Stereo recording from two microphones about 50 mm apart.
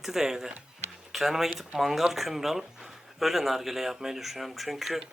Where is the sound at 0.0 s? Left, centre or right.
Centre.